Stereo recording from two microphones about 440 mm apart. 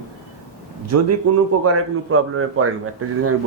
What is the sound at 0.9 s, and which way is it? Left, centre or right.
A man's voice, right.